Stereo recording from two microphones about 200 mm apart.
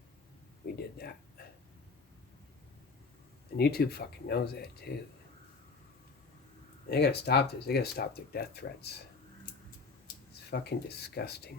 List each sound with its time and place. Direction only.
0.8 s a sound: 50° left (ahead or behind)
3.6 s speech: 55° left (ahead or behind)
6.9 s speech: 55° left (ahead or behind)
10.5 s speech: 55° left (ahead or behind)